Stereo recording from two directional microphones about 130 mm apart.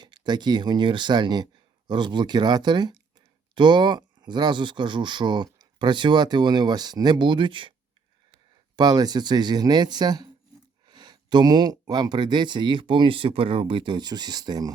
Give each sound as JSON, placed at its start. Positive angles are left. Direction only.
{"t": 0.0, "sound": "speech", "side_deg": -35}
{"t": 8.7, "sound": "speech", "side_deg": -30}